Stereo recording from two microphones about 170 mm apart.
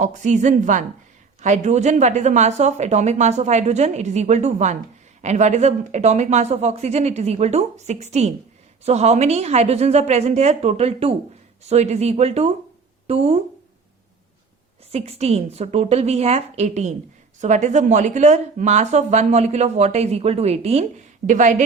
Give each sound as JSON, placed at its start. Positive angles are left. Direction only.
{"t": 0.0, "sound": "speech", "side_deg": -45}
{"t": 14.9, "sound": "speech", "side_deg": -35}